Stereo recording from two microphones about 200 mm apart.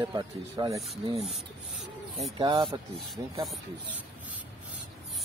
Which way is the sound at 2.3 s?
25° right (ahead or behind).